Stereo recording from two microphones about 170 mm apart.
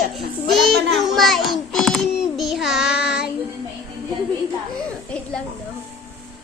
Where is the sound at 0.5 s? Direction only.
Centre (ahead or behind).